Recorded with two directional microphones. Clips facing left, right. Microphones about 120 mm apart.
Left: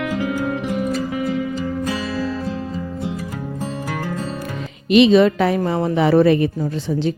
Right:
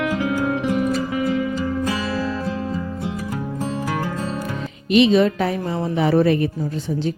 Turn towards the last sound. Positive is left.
turn(degrees=90)